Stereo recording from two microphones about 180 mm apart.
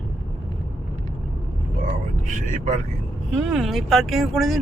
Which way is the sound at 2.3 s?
45° right (ahead or behind).